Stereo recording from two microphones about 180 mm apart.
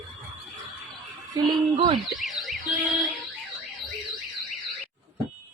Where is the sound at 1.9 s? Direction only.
Centre (ahead or behind).